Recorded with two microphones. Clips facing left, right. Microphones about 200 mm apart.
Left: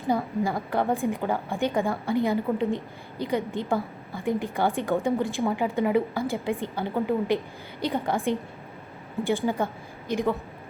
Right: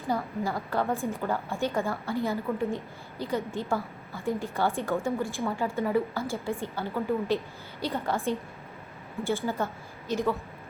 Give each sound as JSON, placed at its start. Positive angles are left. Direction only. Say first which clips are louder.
{"t": 0.1, "sound": "a woman's voice", "louder": "left 4 dB", "side_deg": 15}